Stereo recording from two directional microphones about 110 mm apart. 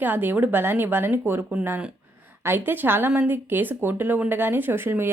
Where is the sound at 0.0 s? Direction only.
20° right (ahead or behind).